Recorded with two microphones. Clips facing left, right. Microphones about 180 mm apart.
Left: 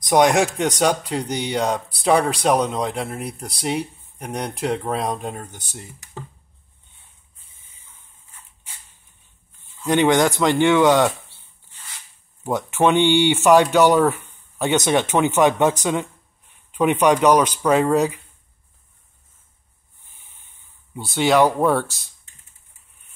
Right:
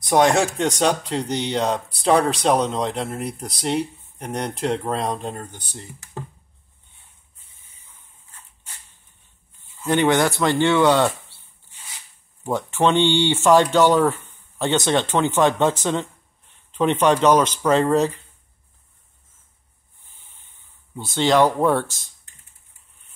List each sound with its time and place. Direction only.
0.0 s speech: 15° left (ahead or behind)
9.8 s speech: 15° left (ahead or behind)
11.7 s a sound: 10° right (ahead or behind)
12.4 s speech: 15° left (ahead or behind)
20.9 s speech: 10° left (ahead or behind)